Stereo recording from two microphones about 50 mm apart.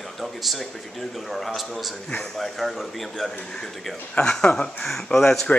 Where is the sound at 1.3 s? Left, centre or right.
Centre.